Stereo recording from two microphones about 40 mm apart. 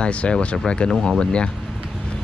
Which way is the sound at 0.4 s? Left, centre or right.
Left.